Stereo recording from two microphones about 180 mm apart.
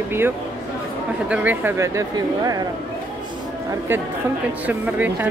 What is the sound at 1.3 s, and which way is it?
Speech, 10° right (ahead or behind).